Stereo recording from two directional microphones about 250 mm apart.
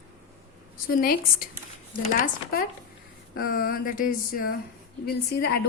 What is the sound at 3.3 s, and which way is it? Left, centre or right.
A woman's voice, left.